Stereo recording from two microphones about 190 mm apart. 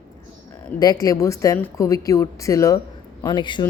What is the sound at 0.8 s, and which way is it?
A man's voice, 20° left (ahead or behind).